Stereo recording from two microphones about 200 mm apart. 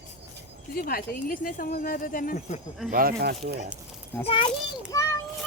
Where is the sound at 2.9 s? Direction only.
45° right (ahead or behind).